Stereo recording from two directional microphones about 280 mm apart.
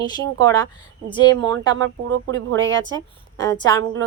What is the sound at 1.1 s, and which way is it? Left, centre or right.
Speech, centre.